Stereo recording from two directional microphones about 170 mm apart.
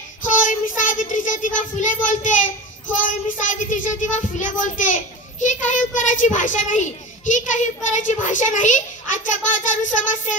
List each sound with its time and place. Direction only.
0.2 s child singing: 50° left (ahead or behind)